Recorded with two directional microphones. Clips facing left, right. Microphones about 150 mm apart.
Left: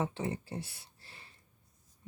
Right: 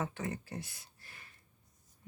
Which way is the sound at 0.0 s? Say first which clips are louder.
Left 3 dB; 25° left (ahead or behind).